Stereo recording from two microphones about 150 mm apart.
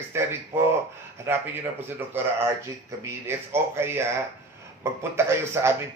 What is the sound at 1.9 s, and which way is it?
Speech, 15° right (ahead or behind).